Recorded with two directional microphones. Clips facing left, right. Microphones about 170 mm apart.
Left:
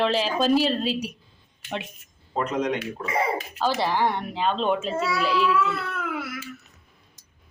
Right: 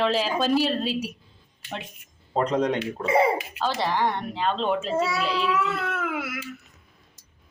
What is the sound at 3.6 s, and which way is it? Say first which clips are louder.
A woman's voice: left 3 dB; 5° left (ahead or behind).